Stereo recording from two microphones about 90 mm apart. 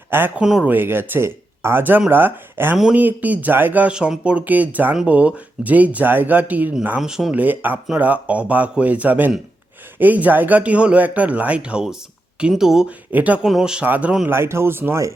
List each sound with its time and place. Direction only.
0.3 s speech: 10° right (ahead or behind)
0.7 s speech: 25° right (ahead or behind)
7.0 s speech: 5° right (ahead or behind)
7.3 s speech: 20° right (ahead or behind)
13.1 s speech: 15° right (ahead or behind)
13.4 s speech: 5° right (ahead or behind)
13.8 s speech: 15° right (ahead or behind)
14.3 s speech: 30° right (ahead or behind)